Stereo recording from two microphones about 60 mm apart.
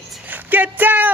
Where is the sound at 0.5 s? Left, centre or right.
Right.